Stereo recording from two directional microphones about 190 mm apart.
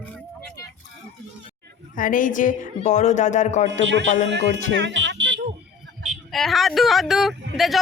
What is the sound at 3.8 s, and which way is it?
Speech, 70° right (ahead or behind).